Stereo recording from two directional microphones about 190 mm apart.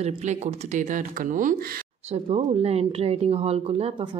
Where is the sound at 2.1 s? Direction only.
30° right (ahead or behind).